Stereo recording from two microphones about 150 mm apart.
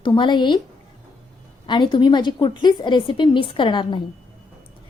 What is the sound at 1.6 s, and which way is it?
A woman's voice, 30° left (ahead or behind).